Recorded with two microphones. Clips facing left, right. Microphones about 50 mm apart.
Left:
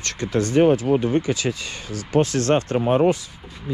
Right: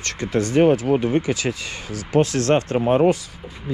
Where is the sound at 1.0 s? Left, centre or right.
Right.